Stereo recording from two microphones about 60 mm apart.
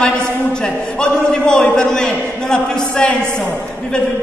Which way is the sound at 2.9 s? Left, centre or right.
Centre.